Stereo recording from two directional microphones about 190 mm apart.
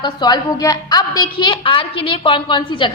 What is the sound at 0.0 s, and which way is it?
A woman's voice, 20° left (ahead or behind).